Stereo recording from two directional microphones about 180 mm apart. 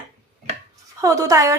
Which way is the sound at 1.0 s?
20° right (ahead or behind).